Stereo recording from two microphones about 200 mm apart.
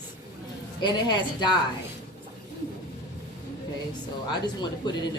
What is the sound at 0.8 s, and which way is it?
Speech, 20° left (ahead or behind).